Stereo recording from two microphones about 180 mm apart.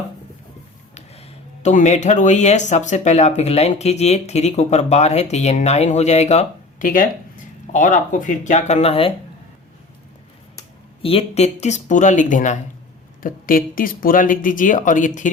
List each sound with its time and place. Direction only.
1.6 s speech: 40° left (ahead or behind)
11.0 s speech: 35° left (ahead or behind)